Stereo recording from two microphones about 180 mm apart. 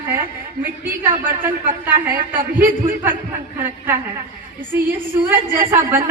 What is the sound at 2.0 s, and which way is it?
A man's voice, 10° right (ahead or behind).